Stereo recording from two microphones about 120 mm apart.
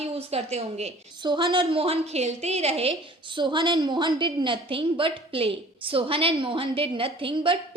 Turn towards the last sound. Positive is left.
turn(degrees=-45)  # may be behind; listen again after turning